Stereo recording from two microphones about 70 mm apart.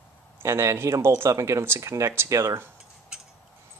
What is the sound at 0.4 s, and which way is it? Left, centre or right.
Speech, right.